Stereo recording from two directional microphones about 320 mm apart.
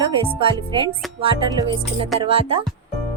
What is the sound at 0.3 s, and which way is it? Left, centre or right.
Speech, centre.